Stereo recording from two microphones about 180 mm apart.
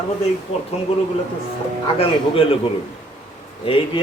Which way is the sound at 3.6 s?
30° left (ahead or behind).